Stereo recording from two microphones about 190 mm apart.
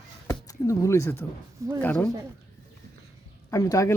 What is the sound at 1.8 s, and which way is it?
Speech, 10° left (ahead or behind).